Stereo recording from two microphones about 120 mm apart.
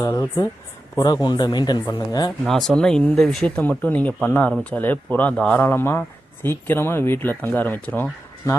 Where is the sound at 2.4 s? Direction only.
5° left (ahead or behind).